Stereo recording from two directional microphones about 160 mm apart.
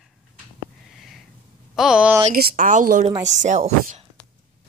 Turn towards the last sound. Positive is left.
turn(degrees=-45)  # may be behind; listen again after turning